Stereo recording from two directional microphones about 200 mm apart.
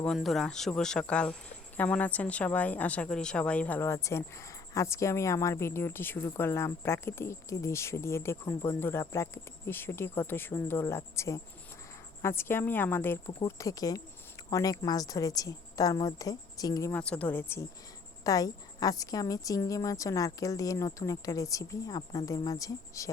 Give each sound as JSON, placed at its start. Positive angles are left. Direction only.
{"t": 0.0, "sound": "speech", "side_deg": 0}
{"t": 17.0, "sound": "speech", "side_deg": 5}